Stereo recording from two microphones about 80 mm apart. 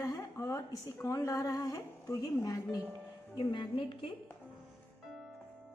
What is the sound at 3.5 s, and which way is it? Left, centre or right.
Speech, left.